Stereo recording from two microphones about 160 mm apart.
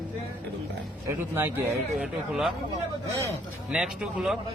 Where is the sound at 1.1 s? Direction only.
15° right (ahead or behind).